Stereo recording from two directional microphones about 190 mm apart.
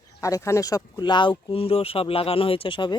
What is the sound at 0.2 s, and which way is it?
Speech, 15° left (ahead or behind).